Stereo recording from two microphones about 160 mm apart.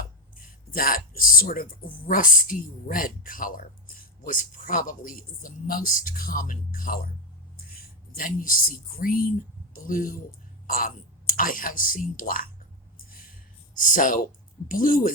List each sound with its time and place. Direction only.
0.7 s speech: 65° left (ahead or behind)
7.5 s a sound: 65° left (ahead or behind)
9.0 s speech: 60° left (ahead or behind)
13.7 s speech: 55° left (ahead or behind)